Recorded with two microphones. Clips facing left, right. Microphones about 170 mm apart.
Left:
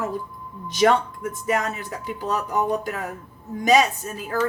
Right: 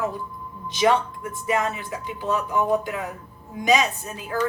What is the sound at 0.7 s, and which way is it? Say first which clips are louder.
A woman's voice: left 2 dB; 50° left (ahead or behind).